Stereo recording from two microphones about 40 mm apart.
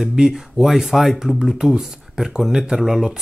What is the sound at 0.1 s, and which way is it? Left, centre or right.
Speech, centre.